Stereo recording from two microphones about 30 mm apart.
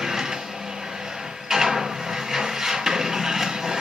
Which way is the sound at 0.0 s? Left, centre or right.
Centre.